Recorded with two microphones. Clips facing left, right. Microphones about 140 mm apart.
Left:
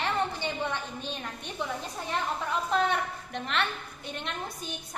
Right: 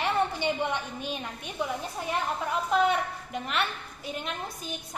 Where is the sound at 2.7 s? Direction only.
5° right (ahead or behind).